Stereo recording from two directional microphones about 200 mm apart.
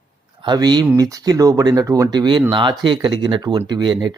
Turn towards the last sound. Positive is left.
turn(degrees=-20)  # may be behind; listen again after turning